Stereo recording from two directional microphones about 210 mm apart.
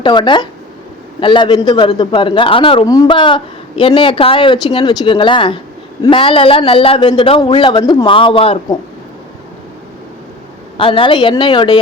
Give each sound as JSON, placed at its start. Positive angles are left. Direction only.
{"t": 0.0, "sound": "a man's voice", "side_deg": 20}
{"t": 10.8, "sound": "a man's voice", "side_deg": 25}